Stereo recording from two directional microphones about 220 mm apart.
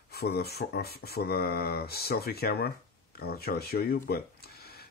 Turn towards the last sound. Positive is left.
turn(degrees=45)  # may be behind; listen again after turning